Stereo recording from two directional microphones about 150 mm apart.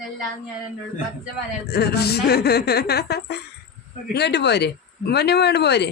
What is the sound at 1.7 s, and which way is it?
Speech, 90° left.